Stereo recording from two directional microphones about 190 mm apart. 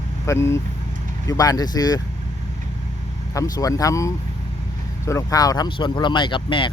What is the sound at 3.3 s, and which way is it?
Speech, 20° left (ahead or behind).